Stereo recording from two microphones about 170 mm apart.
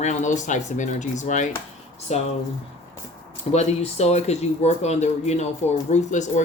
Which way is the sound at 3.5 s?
40° left (ahead or behind).